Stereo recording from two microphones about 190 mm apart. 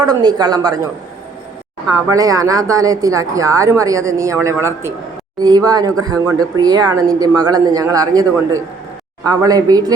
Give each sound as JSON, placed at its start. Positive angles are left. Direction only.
{"t": 0.0, "sound": "speech", "side_deg": -20}
{"t": 1.9, "sound": "speech", "side_deg": -20}
{"t": 9.2, "sound": "speech", "side_deg": -20}